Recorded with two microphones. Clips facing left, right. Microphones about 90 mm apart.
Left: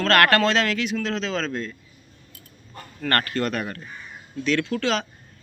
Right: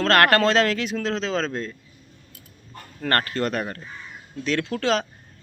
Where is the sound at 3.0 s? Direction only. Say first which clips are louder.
Even; 30° right (ahead or behind).